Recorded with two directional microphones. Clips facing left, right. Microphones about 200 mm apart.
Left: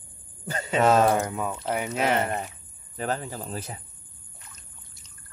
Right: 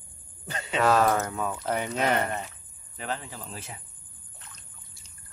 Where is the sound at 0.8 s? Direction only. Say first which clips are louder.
Left 3 dB; 25° left (ahead or behind).